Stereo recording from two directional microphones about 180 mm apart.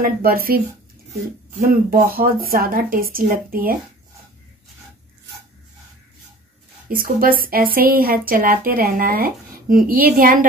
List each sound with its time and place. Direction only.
0.0 s speech: 55° right (ahead or behind)
1.6 s a woman's voice: 55° right (ahead or behind)
6.9 s a woman's voice: 50° right (ahead or behind)